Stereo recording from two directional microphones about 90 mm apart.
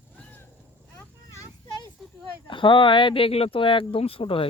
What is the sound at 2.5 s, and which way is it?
Speech, 65° left (ahead or behind).